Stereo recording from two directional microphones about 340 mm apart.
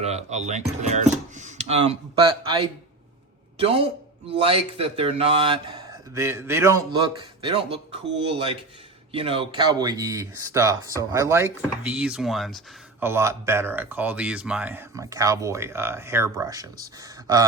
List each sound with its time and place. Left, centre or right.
0.0 s speech: centre